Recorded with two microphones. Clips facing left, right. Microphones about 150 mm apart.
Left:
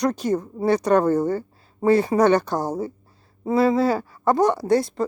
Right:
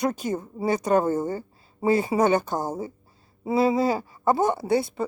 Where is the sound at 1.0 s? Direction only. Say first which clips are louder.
Left 5 dB; 70° left (ahead or behind).